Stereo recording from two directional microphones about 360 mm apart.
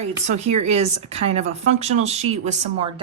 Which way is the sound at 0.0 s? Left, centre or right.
Centre.